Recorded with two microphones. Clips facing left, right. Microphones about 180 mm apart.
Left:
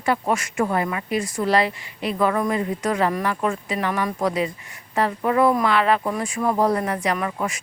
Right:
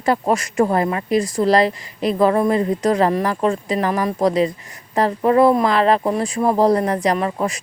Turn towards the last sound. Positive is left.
turn(degrees=-30)  # may be behind; listen again after turning